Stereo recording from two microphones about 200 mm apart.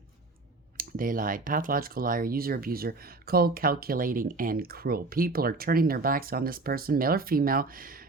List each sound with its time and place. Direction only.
0.8 s speech: 45° right (ahead or behind)